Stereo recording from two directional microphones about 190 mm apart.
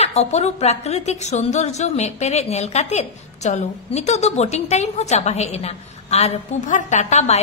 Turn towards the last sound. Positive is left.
turn(degrees=35)  # may be behind; listen again after turning